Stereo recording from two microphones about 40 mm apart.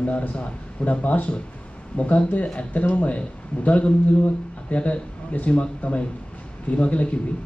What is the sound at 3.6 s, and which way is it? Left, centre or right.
Speech, left.